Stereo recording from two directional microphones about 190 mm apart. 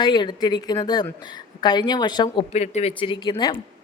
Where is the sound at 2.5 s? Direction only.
35° left (ahead or behind).